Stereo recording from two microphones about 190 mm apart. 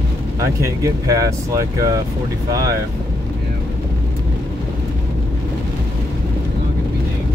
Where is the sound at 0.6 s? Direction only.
15° right (ahead or behind).